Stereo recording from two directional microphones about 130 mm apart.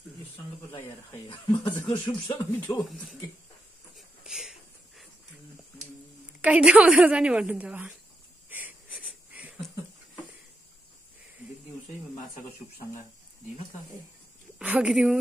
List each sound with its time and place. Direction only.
1.2 s speech: 40° left (ahead or behind)
3.9 s wheeze: 5° right (ahead or behind)
6.4 s a woman's voice: 10° right (ahead or behind)
8.5 s wheeze: 15° right (ahead or behind)
14.6 s a woman's voice: 10° right (ahead or behind)